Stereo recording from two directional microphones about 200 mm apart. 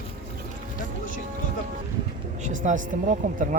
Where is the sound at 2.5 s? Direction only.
40° right (ahead or behind).